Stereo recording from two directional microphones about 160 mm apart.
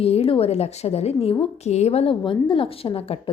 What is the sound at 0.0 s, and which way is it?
A woman's voice, 40° left (ahead or behind).